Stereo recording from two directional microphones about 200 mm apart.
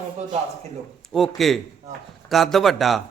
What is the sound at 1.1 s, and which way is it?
A man's voice, centre (ahead or behind).